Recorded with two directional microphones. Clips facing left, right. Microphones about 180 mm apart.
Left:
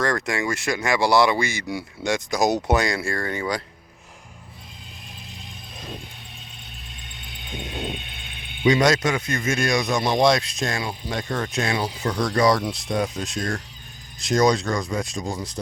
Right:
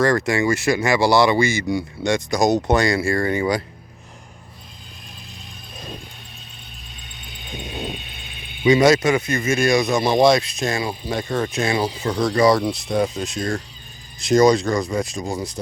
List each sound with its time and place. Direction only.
0.0 s speech: 5° right (ahead or behind)
8.0 s a sound: 65° left (ahead or behind)
8.6 s speech: 5° right (ahead or behind)